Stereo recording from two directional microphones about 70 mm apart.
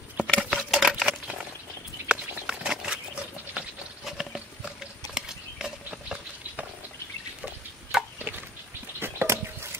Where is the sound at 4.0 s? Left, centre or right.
Centre.